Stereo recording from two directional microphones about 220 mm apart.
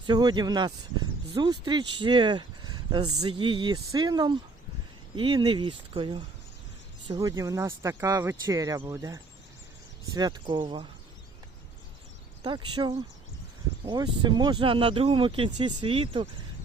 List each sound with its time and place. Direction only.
0.0 s speech: 20° right (ahead or behind)
12.4 s speech: 20° right (ahead or behind)